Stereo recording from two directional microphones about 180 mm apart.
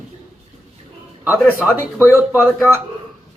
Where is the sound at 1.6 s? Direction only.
Centre (ahead or behind).